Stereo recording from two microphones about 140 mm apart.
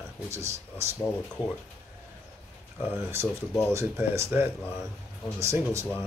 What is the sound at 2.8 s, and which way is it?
Speech, 15° right (ahead or behind).